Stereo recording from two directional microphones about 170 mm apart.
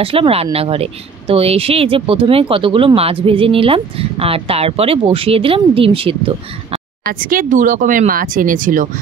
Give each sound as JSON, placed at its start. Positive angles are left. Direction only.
{"t": 0.0, "sound": "speech", "side_deg": -35}
{"t": 7.1, "sound": "speech", "side_deg": -55}